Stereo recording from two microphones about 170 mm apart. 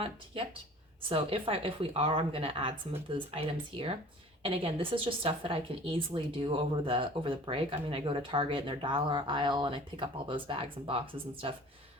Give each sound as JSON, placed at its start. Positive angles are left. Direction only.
{"t": 1.1, "sound": "a woman's voice", "side_deg": -35}